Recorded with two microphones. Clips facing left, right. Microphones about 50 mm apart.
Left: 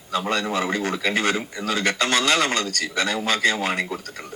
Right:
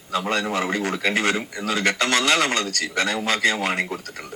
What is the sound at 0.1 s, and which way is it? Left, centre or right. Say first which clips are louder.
A man's voice: even; right.